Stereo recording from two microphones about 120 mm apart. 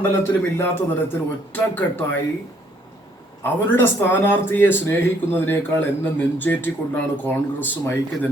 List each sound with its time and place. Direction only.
0.0 s a man's voice: 20° left (ahead or behind)
3.7 s speech: 20° left (ahead or behind)